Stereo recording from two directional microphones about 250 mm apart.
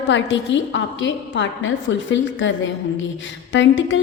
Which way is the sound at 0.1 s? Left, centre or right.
Left.